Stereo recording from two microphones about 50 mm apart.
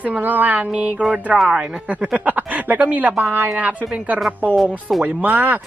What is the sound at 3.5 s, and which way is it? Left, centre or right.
Speech, right.